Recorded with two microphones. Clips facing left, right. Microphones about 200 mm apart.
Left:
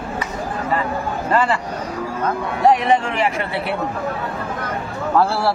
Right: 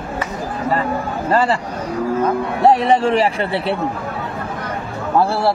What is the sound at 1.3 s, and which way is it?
Speech, 35° right (ahead or behind).